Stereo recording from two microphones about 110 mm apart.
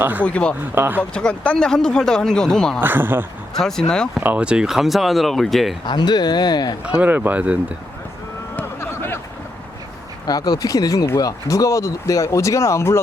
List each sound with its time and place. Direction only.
0.0 s speech: 15° right (ahead or behind)
0.3 s speech: 10° left (ahead or behind)
0.8 s speech: 20° right (ahead or behind)
1.1 s speech: 10° left (ahead or behind)
2.8 s speech: 20° right (ahead or behind)
3.6 s speech: 5° left (ahead or behind)
4.2 s speech: 15° right (ahead or behind)
5.8 s speech: 40° left (ahead or behind)
6.8 s speech: 10° right (ahead or behind)
8.5 s vehicle: 20° left (ahead or behind)
10.2 s speech: 35° left (ahead or behind)